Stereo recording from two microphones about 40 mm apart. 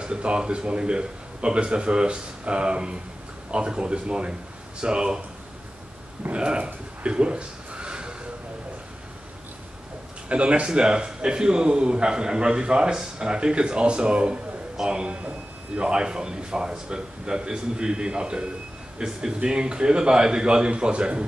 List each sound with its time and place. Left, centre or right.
0.0 s a man's voice: right
6.3 s a sound: right
10.2 s a man's voice: right